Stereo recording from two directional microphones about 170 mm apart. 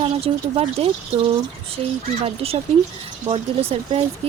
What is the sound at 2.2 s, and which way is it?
Speech, 35° right (ahead or behind).